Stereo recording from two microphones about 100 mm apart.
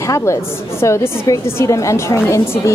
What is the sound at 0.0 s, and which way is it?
A woman's voice, 30° left (ahead or behind).